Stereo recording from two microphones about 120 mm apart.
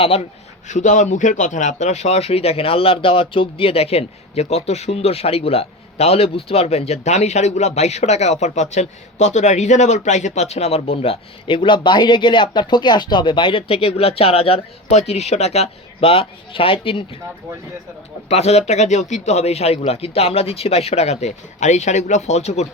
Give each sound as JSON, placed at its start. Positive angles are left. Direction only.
{"t": 0.0, "sound": "speech", "side_deg": 55}
{"t": 0.7, "sound": "speech", "side_deg": 90}
{"t": 18.3, "sound": "speech", "side_deg": 65}